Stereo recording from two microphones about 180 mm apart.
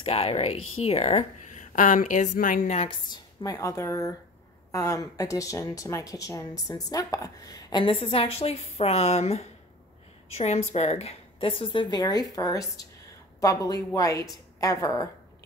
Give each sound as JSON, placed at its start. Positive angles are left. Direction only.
{"t": 0.0, "sound": "speech", "side_deg": 35}